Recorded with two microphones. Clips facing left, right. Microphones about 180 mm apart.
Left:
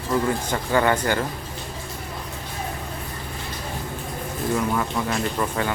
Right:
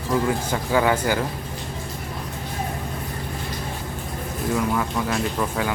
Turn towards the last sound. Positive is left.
turn(degrees=-5)  # may be behind; listen again after turning